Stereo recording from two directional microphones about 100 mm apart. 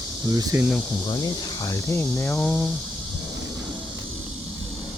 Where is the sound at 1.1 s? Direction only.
45° left (ahead or behind).